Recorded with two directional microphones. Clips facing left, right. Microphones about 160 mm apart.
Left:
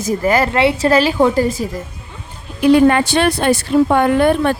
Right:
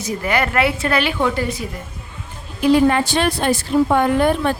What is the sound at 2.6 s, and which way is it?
A woman's voice, 60° left (ahead or behind).